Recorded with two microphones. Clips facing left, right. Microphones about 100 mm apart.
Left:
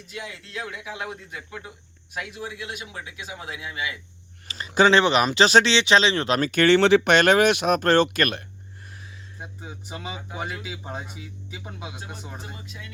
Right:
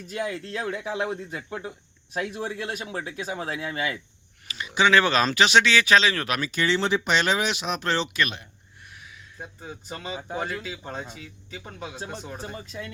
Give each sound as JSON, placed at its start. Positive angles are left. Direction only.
{"t": 0.1, "sound": "speech", "side_deg": -45}
{"t": 4.4, "sound": "a sound", "side_deg": 35}
{"t": 4.9, "sound": "speech", "side_deg": 20}
{"t": 5.4, "sound": "speech", "side_deg": 35}
{"t": 5.7, "sound": "speech", "side_deg": 25}
{"t": 6.4, "sound": "speech", "side_deg": 60}
{"t": 9.4, "sound": "speech", "side_deg": 15}
{"t": 12.6, "sound": "speech", "side_deg": -35}